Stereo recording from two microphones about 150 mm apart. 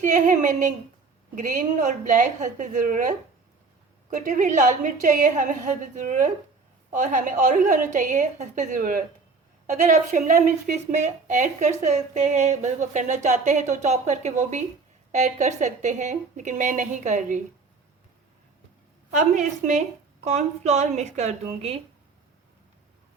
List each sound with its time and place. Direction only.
0.0 s a woman's voice: 55° right (ahead or behind)
19.1 s speech: 55° right (ahead or behind)